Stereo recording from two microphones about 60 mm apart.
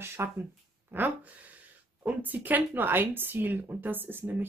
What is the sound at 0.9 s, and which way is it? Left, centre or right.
A woman's voice, right.